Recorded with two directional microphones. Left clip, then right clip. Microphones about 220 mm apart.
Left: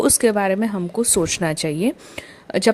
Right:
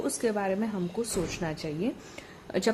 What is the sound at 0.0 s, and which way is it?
A woman's voice, 45° left (ahead or behind).